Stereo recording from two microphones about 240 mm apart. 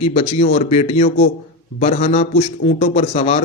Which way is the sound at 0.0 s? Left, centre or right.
Left.